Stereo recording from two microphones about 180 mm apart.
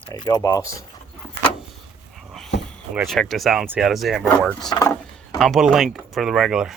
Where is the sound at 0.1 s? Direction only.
20° left (ahead or behind).